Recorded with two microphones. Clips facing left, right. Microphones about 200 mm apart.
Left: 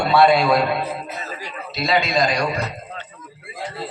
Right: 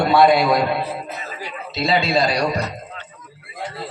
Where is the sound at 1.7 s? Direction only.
30° right (ahead or behind).